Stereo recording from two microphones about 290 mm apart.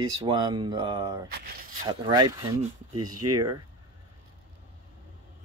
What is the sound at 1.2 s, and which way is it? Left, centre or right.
Speech, right.